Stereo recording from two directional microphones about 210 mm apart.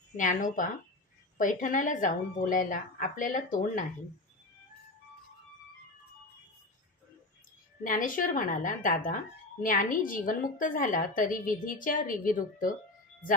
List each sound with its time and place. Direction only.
0.2 s a woman's voice: 40° left (ahead or behind)
7.9 s a woman's voice: 40° left (ahead or behind)